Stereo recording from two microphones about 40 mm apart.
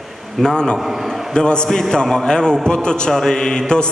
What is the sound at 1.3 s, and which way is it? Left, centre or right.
Mantra, left.